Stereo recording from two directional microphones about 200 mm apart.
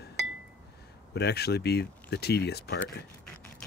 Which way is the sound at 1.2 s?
55° left (ahead or behind).